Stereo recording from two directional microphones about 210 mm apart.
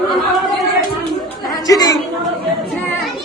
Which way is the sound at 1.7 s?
15° left (ahead or behind).